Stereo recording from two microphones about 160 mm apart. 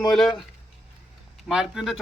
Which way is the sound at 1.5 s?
5° right (ahead or behind).